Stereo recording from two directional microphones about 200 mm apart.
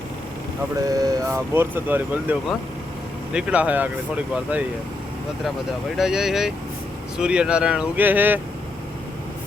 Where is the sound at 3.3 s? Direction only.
5° right (ahead or behind).